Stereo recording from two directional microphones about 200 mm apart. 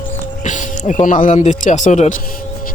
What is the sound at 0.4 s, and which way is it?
Speech, 40° left (ahead or behind).